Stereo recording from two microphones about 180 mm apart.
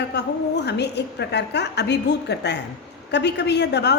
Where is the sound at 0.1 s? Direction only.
70° left (ahead or behind).